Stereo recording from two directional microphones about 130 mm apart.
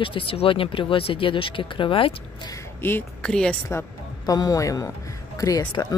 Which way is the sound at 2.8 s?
15° left (ahead or behind).